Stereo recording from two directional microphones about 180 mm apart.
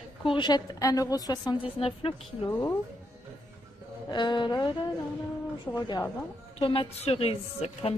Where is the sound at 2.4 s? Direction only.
20° left (ahead or behind).